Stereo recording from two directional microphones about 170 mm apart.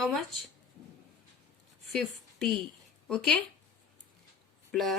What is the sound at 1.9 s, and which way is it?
A woman's voice, centre (ahead or behind).